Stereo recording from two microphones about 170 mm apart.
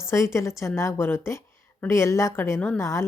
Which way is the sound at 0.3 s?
15° left (ahead or behind).